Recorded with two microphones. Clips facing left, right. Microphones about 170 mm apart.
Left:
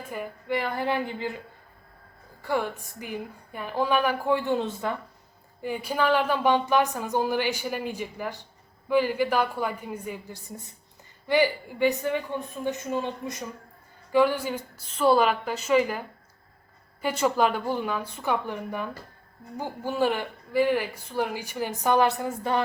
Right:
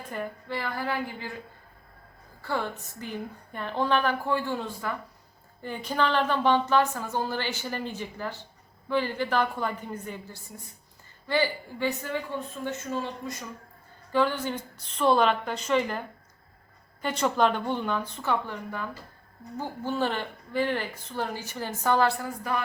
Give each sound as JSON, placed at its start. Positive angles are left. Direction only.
{"t": 0.1, "sound": "a woman's voice", "side_deg": 10}
{"t": 2.4, "sound": "speech", "side_deg": 15}
{"t": 5.6, "sound": "speech", "side_deg": 10}